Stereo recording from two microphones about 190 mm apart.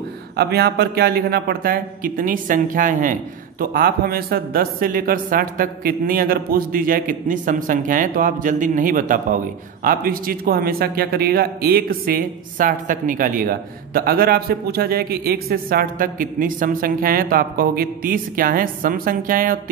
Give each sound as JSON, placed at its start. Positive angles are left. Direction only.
{"t": 0.4, "sound": "a man's voice", "side_deg": -60}